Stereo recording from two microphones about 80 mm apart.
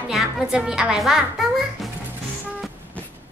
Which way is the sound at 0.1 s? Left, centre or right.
Centre.